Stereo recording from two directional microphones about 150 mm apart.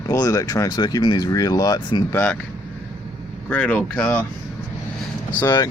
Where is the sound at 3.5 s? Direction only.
10° left (ahead or behind).